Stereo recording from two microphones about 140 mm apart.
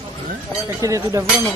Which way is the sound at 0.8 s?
25° right (ahead or behind).